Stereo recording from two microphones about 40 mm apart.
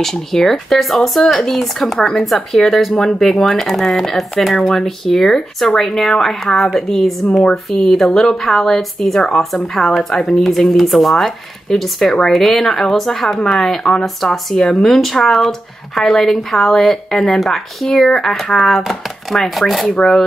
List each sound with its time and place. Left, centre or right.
0.0 s speech: centre
2.0 s speech: centre
2.2 s speech: centre
9.9 s speech: centre
10.4 s speech: centre
19.9 s speech: centre